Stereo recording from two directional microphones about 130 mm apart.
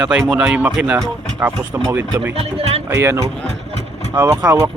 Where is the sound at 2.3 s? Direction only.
50° right (ahead or behind).